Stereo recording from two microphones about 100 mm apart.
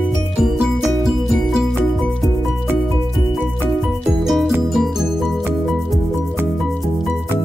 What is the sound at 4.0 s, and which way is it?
Music, centre (ahead or behind).